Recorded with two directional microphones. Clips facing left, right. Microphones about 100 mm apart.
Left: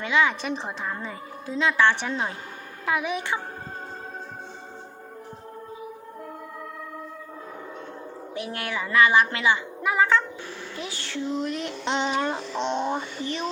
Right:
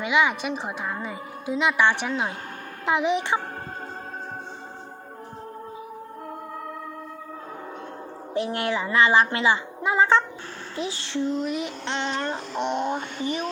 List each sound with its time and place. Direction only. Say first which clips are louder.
0.0 s a woman's voice: right 1 dB; 15° right (ahead or behind)
2.0 s speech: right 1 dB; 5° right (ahead or behind)
2.8 s speech: right 4 dB; 20° right (ahead or behind)
8.4 s speech: right 6 dB; 25° right (ahead or behind)
11.3 s speech: right 1 dB; 5° right (ahead or behind)
11.9 s a sound: left 4 dB; 10° left (ahead or behind)
12.5 s speech: right 1 dB; 5° right (ahead or behind)